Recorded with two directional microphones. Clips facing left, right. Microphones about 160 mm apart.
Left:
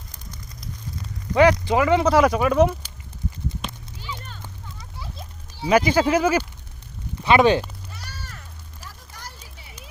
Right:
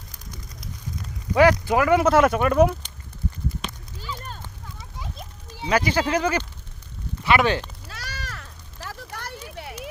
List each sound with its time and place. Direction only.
1.3 s speech: 5° right (ahead or behind)
4.9 s children playing: 20° right (ahead or behind)
5.6 s speech: 15° left (ahead or behind)
7.3 s speech: 20° left (ahead or behind)
7.9 s a sound: 90° right; by 9.9 s 65° right (ahead or behind)